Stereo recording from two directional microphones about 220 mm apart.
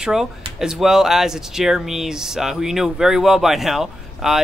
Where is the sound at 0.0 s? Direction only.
Centre (ahead or behind).